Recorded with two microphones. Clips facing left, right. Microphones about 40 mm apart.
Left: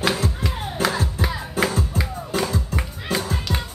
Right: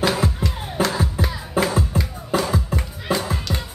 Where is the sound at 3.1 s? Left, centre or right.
Centre.